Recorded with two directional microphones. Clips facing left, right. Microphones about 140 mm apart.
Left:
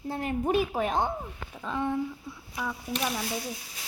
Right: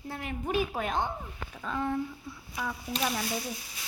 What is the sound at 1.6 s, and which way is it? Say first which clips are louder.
Speech: left 2 dB; 20° left (ahead or behind).